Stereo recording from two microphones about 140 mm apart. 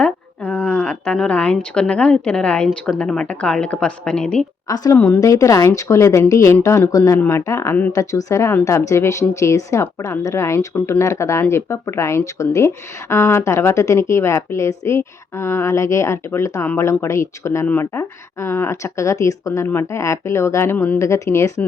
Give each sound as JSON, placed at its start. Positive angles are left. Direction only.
{"t": 0.0, "sound": "a woman's voice", "side_deg": 10}
{"t": 4.7, "sound": "a woman's voice", "side_deg": 25}